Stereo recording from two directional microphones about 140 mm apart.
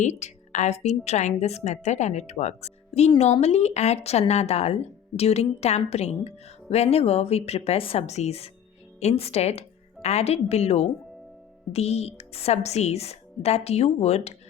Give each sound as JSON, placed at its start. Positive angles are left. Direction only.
{"t": 0.0, "sound": "a woman's voice", "side_deg": 55}